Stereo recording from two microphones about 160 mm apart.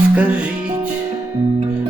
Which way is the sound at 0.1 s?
10° right (ahead or behind).